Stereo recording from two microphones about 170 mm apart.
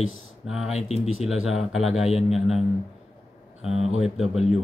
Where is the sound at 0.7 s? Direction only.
40° left (ahead or behind).